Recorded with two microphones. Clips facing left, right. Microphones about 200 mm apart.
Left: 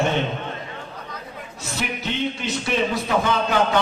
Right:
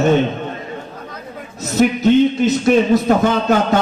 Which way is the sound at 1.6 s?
45° right (ahead or behind).